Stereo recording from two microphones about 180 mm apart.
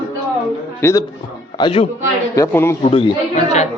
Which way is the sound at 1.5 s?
30° left (ahead or behind).